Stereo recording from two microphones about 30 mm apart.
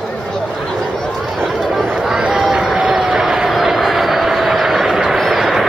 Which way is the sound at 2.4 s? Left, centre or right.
Centre.